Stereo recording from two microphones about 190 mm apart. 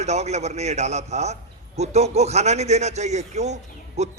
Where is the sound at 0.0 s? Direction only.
35° right (ahead or behind).